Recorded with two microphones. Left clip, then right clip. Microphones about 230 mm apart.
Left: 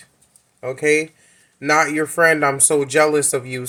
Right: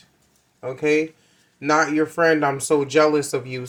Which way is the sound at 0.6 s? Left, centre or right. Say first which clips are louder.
Left 3 dB; left.